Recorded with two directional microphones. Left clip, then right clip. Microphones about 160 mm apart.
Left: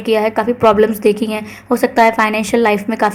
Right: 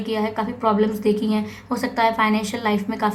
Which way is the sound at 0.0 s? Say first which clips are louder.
Left 10 dB; 45° left (ahead or behind).